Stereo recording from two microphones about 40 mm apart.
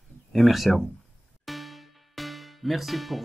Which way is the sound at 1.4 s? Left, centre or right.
Centre.